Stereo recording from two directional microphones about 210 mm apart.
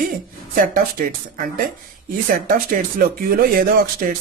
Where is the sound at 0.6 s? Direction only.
40° right (ahead or behind).